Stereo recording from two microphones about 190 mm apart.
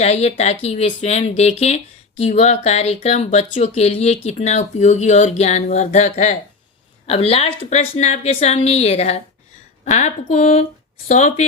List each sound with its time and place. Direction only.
0.0 s speech: 35° left (ahead or behind)